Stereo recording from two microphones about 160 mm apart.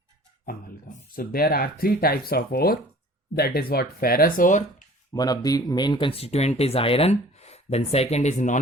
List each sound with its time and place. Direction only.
0.4 s speech: 60° left (ahead or behind)
5.1 s speech: 25° left (ahead or behind); by 8.5 s 45° left (ahead or behind)